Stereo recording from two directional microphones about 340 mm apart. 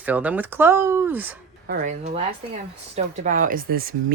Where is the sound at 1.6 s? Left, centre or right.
Right.